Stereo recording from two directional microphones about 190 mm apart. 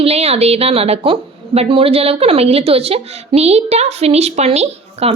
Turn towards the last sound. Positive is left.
turn(degrees=-35)  # may be behind; listen again after turning